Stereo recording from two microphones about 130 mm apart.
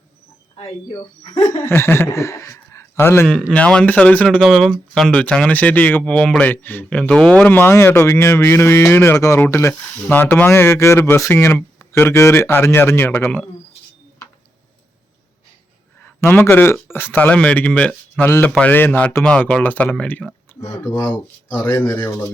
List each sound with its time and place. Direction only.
0.5 s speech: 45° left (ahead or behind)
1.3 s a man's voice: 30° left (ahead or behind)
3.5 s speech: 10° left (ahead or behind)
16.0 s speech: 15° left (ahead or behind)